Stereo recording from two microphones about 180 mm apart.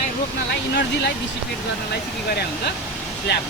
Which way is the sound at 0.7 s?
70° left (ahead or behind).